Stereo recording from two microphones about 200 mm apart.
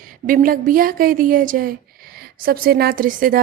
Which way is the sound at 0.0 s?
45° right (ahead or behind).